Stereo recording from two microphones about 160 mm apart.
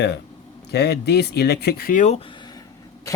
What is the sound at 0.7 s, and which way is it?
Speech, 90° left.